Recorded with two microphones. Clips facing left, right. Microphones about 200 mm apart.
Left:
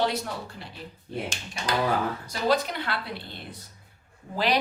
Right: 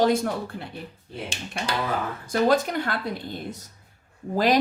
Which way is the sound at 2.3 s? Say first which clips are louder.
Right 6 dB; 45° right (ahead or behind).